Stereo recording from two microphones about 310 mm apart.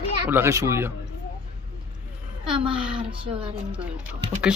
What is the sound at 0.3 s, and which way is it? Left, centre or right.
Speech, centre.